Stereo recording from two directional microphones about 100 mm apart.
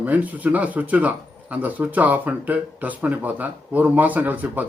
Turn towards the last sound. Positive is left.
turn(degrees=-15)  # may be behind; listen again after turning